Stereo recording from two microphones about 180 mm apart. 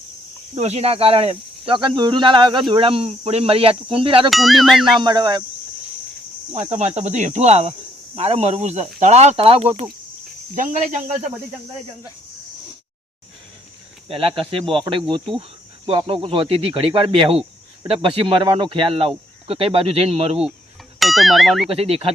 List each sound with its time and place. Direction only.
0.5 s speech: 35° right (ahead or behind)
4.3 s music: centre (ahead or behind)
4.9 s speech: 25° right (ahead or behind)
6.5 s speech: 40° right (ahead or behind)
14.1 s speech: 30° right (ahead or behind)
21.0 s music: centre (ahead or behind)
21.7 s speech: 35° right (ahead or behind)